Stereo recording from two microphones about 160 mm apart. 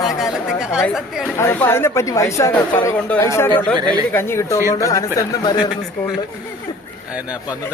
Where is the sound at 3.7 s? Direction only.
30° right (ahead or behind).